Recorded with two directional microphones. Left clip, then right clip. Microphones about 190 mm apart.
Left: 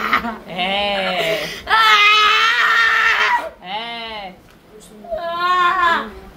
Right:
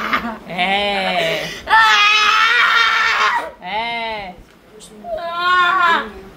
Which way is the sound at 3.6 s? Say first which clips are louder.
Right 5 dB; 35° right (ahead or behind).